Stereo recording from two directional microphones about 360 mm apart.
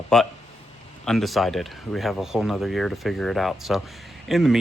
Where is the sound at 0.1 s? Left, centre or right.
Centre.